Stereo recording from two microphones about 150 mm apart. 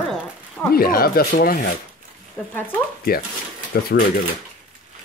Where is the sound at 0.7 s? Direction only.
80° left.